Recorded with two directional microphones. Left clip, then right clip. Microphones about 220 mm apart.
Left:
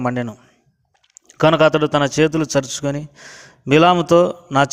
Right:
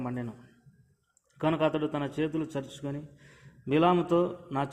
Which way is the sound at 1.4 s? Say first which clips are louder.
Left 15 dB; 40° left (ahead or behind).